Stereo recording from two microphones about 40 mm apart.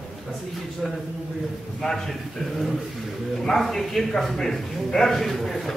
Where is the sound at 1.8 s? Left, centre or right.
Centre.